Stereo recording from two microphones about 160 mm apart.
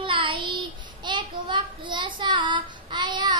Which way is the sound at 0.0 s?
30° right (ahead or behind).